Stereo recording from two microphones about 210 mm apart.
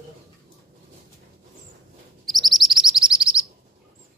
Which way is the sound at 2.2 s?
Centre (ahead or behind).